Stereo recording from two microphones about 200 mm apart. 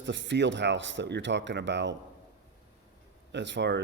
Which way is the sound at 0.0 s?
65° right (ahead or behind).